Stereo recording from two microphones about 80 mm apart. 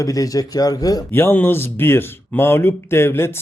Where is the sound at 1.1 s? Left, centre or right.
Left.